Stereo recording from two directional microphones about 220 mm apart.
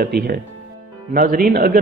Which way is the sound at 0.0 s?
45° right (ahead or behind).